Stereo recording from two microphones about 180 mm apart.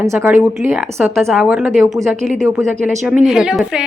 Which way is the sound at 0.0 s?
15° right (ahead or behind).